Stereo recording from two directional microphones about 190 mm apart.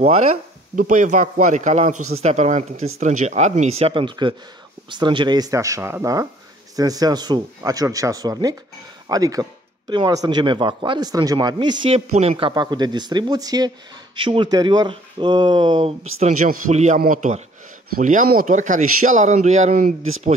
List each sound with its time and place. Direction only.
0.7 s speech: 40° right (ahead or behind)
16.2 s speech: 40° right (ahead or behind)
20.0 s speech: 90° right